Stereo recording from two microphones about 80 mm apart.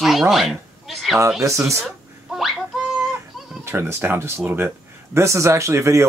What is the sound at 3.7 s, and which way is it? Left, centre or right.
Speech, right.